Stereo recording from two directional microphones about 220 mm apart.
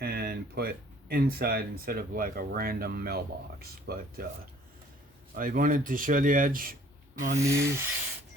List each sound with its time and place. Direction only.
0.0 s speech: 45° right (ahead or behind)
5.3 s speech: 40° right (ahead or behind)
7.3 s a sound: 15° right (ahead or behind)